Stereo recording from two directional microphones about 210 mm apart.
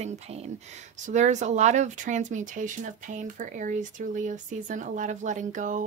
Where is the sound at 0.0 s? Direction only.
30° right (ahead or behind).